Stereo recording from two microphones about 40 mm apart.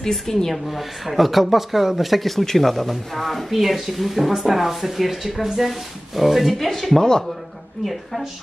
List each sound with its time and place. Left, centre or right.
0.0 s speech: centre
0.7 s speech: centre
7.0 s speech: centre
7.8 s speech: centre